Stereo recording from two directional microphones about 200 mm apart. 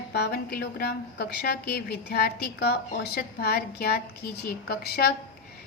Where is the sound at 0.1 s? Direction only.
55° left (ahead or behind).